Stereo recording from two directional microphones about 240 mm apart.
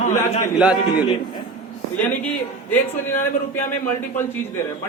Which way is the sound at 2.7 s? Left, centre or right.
Centre.